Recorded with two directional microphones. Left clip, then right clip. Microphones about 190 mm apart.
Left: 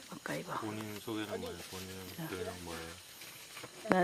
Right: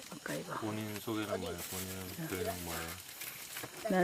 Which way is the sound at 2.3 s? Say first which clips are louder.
Right 4 dB; 25° right (ahead or behind).